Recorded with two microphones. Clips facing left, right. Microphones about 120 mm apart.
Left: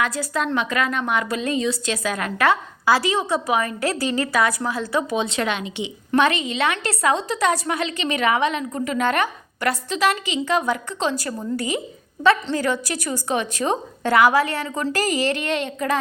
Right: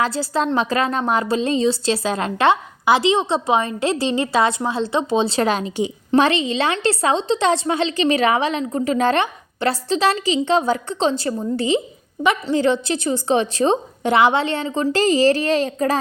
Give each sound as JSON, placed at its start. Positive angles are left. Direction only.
{"t": 0.0, "sound": "a woman's voice", "side_deg": -30}
{"t": 6.1, "sound": "a woman's voice", "side_deg": -30}